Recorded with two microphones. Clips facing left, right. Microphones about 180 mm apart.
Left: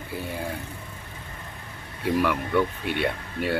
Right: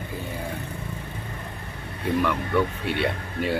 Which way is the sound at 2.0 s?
Centre (ahead or behind).